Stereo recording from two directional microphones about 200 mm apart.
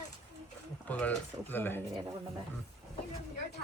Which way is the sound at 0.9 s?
10° left (ahead or behind).